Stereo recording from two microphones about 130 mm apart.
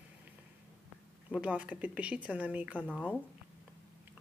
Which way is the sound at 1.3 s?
10° right (ahead or behind).